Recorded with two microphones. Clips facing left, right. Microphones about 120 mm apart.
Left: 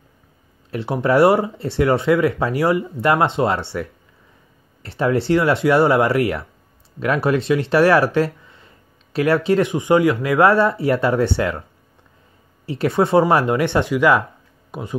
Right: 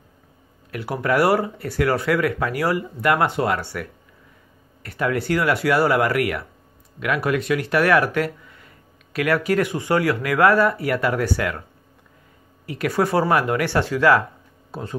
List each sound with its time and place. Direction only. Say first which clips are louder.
0.7 s speech: left 4 dB; 25° left (ahead or behind)
12.6 s speech: left 3 dB; 25° left (ahead or behind)